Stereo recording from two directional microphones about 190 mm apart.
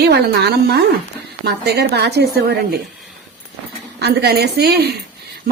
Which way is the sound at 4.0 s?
55° right (ahead or behind).